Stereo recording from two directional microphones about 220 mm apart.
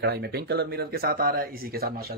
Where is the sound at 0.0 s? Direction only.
45° right (ahead or behind).